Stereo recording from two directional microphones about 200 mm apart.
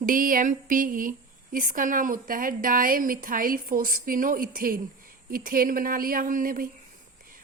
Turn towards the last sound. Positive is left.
turn(degrees=-45)  # may be behind; listen again after turning